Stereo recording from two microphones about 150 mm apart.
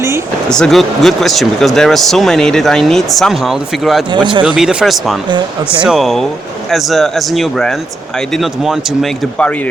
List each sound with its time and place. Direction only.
0.4 s speech: 5° left (ahead or behind)
4.1 s speech: 30° right (ahead or behind)
4.4 s speech: 5° right (ahead or behind)